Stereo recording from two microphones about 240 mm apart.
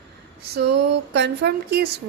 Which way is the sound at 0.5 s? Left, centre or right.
Right.